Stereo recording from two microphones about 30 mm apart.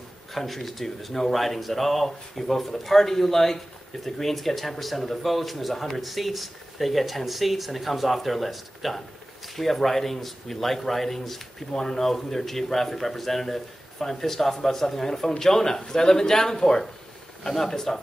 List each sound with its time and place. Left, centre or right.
0.3 s speech: centre